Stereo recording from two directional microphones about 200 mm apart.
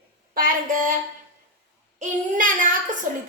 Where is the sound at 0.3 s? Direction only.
45° right (ahead or behind).